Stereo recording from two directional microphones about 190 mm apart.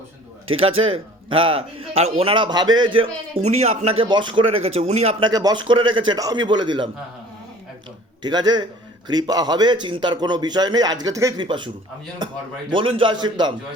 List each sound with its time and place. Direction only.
0.8 s a man's voice: 30° right (ahead or behind)
5.3 s a man's voice: 20° right (ahead or behind)
8.2 s a man's voice: 20° right (ahead or behind)
12.7 s a man's voice: 25° right (ahead or behind)